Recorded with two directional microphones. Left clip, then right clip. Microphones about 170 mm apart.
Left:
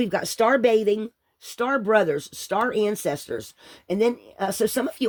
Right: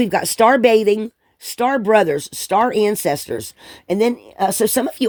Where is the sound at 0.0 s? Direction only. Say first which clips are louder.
Right 7 dB; 40° right (ahead or behind).